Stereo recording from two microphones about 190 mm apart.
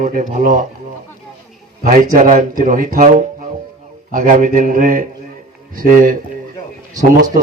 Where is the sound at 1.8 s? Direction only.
45° right (ahead or behind).